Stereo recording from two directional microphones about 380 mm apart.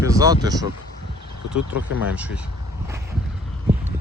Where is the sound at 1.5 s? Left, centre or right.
Left.